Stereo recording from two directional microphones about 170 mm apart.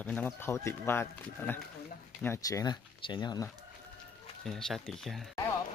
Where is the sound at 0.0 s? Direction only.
10° left (ahead or behind); by 3.4 s 25° left (ahead or behind).